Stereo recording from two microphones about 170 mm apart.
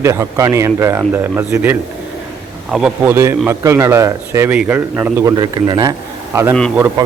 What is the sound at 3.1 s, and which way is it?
A man's voice, 15° right (ahead or behind).